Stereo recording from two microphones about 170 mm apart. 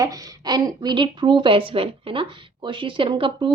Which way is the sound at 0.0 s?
20° right (ahead or behind).